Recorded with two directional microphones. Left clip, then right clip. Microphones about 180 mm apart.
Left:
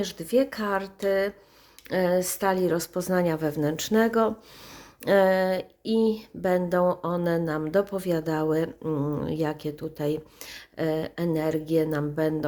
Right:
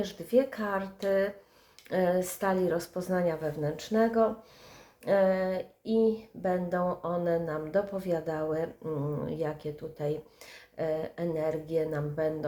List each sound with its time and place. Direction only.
0.0 s speech: 40° left (ahead or behind)